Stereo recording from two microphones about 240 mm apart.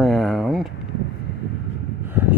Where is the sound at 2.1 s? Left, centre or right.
Centre.